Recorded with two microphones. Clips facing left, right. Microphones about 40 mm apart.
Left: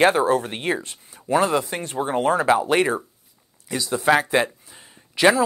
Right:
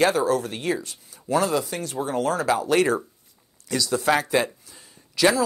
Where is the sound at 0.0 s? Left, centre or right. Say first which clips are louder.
Left 3 dB; left.